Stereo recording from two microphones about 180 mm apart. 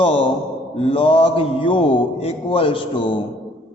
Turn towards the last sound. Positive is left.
turn(degrees=30)  # may be behind; listen again after turning